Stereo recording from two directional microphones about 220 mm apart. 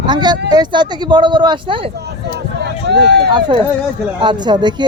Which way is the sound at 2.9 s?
50° right (ahead or behind).